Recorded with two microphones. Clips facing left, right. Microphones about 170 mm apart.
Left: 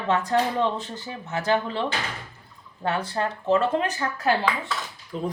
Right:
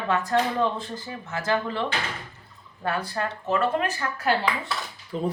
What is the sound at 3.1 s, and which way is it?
Speech, 25° left (ahead or behind).